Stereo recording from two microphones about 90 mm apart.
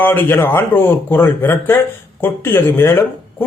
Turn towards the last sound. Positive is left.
turn(degrees=25)  # may be behind; listen again after turning